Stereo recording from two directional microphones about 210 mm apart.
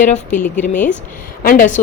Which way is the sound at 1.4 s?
40° left (ahead or behind).